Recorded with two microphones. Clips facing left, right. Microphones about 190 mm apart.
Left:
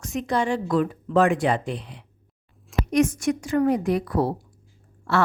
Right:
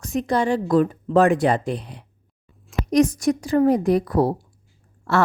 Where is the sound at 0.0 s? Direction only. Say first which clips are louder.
Right 3 dB; 35° right (ahead or behind).